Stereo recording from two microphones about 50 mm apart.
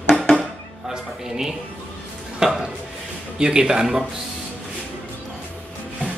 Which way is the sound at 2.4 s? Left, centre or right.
Centre.